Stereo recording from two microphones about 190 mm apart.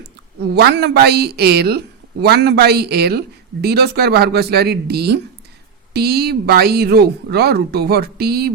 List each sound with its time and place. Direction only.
0.5 s speech: 60° right (ahead or behind)